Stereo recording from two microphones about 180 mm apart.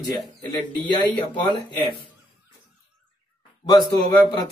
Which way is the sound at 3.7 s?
25° left (ahead or behind).